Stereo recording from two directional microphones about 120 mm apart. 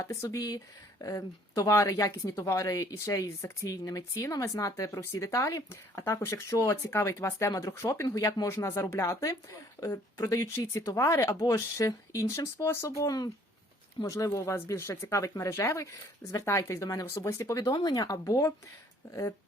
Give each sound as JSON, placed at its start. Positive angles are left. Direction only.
{"t": 0.0, "sound": "speech", "side_deg": 25}